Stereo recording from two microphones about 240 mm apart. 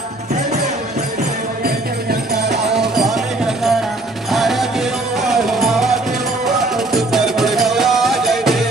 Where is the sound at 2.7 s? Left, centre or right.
Centre.